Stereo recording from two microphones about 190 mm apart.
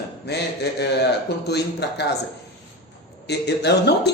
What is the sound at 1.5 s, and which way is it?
Speech, 60° left (ahead or behind).